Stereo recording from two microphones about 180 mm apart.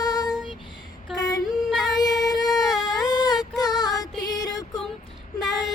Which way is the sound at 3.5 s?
20° left (ahead or behind).